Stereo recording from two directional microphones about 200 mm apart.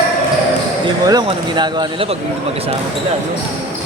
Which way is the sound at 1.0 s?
20° right (ahead or behind).